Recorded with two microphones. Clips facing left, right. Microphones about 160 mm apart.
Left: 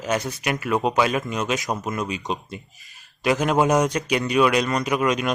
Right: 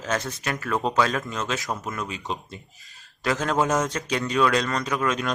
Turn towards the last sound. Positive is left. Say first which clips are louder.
# left 4 dB
turn(degrees=15)  # may be behind; listen again after turning